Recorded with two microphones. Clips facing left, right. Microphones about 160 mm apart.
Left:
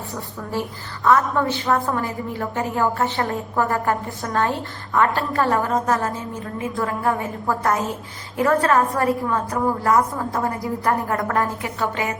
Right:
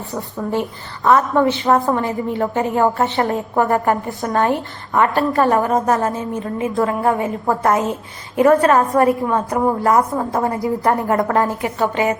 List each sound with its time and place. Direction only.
1.0 s a woman's voice: 20° right (ahead or behind)